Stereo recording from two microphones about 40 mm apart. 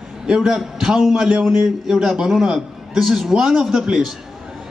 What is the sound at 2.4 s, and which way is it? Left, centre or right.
Speech, right.